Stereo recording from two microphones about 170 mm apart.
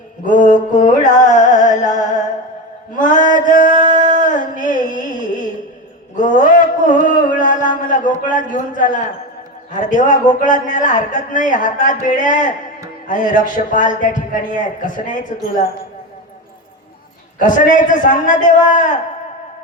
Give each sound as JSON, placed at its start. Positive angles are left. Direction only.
{"t": 0.3, "sound": "music", "side_deg": 50}
{"t": 2.9, "sound": "male singing", "side_deg": 50}
{"t": 6.1, "sound": "a sound", "side_deg": 50}
{"t": 8.3, "sound": "a man's voice", "side_deg": 50}
{"t": 17.4, "sound": "a man's voice", "side_deg": 50}